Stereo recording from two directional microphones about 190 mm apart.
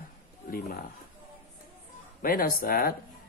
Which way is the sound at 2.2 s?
50° left (ahead or behind).